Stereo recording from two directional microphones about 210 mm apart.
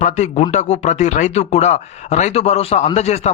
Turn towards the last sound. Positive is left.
turn(degrees=30)  # may be behind; listen again after turning